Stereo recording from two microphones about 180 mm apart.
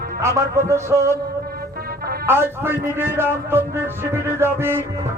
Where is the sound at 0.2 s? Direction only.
15° right (ahead or behind).